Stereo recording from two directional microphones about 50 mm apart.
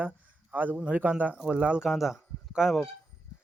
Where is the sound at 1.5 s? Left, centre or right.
Right.